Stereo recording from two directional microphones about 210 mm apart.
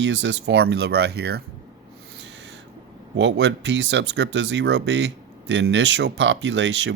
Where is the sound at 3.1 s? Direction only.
60° right (ahead or behind).